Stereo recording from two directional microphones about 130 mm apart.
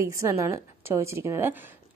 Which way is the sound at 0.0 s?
20° right (ahead or behind).